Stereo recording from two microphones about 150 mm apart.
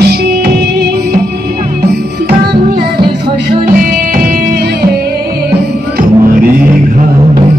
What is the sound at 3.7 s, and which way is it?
Music, 70° right (ahead or behind).